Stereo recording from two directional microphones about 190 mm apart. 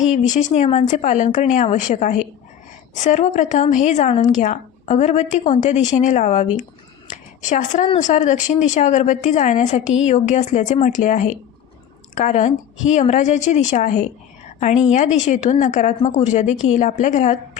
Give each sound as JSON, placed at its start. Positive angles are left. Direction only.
{"t": 0.3, "sound": "a woman's voice", "side_deg": 40}